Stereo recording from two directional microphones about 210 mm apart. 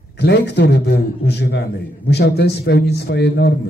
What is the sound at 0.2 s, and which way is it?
A man's voice, 50° left (ahead or behind).